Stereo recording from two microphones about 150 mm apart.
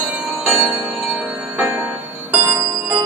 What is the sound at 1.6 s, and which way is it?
Music, 15° right (ahead or behind).